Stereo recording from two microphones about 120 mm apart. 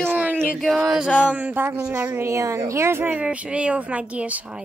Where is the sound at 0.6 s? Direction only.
Centre (ahead or behind).